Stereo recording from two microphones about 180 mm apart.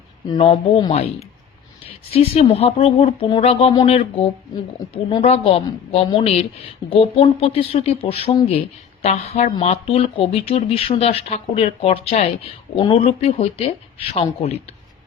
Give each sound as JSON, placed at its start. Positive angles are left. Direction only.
{"t": 0.3, "sound": "speech", "side_deg": 30}
{"t": 2.1, "sound": "speech", "side_deg": 35}